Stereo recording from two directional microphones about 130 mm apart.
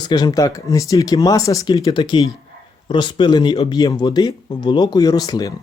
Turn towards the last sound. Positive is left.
turn(degrees=30)  # may be behind; listen again after turning